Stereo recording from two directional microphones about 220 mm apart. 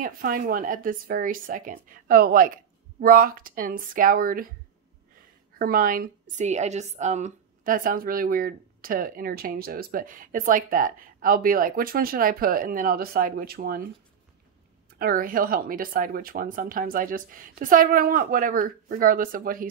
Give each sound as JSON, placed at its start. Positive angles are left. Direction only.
{"t": 0.0, "sound": "a woman's voice", "side_deg": -40}
{"t": 5.6, "sound": "a woman's voice", "side_deg": -40}
{"t": 15.0, "sound": "a woman's voice", "side_deg": -40}